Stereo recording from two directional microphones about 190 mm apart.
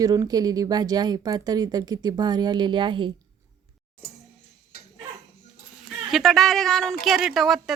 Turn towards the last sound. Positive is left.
turn(degrees=0)  # may be behind; listen again after turning